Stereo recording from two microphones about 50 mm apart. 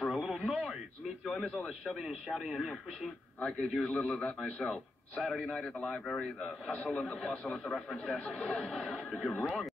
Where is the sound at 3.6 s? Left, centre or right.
Centre.